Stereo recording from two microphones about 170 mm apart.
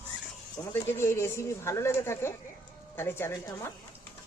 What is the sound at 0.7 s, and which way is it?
A woman's voice, 15° left (ahead or behind).